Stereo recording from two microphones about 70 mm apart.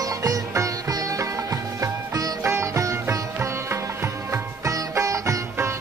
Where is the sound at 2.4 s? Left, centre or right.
Right.